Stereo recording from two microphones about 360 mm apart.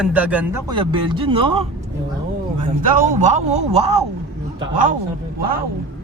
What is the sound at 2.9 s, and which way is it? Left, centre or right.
A man's voice, right.